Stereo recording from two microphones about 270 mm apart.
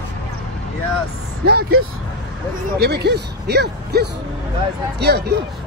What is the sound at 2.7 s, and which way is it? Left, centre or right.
Speech, right.